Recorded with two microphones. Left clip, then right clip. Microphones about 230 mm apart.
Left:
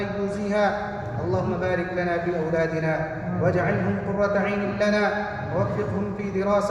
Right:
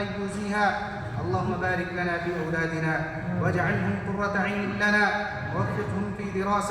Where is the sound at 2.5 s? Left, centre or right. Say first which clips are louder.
Left 4 dB; centre.